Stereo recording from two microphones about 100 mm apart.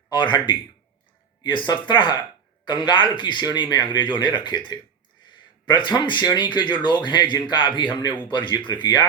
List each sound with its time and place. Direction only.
0.1 s speech: 50° left (ahead or behind)
1.5 s speech: 50° left (ahead or behind)
5.3 s a sound: 50° left (ahead or behind)
6.2 s speech: 45° left (ahead or behind)